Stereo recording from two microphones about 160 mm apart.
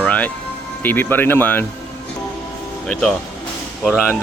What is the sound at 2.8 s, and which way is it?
Speech, 5° left (ahead or behind).